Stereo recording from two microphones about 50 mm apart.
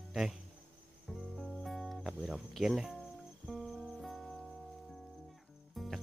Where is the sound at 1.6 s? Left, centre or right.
Centre.